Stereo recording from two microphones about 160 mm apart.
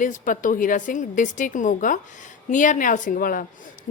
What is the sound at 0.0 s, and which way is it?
A woman's voice, 55° left (ahead or behind).